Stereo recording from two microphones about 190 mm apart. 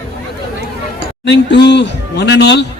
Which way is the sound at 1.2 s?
65° left (ahead or behind).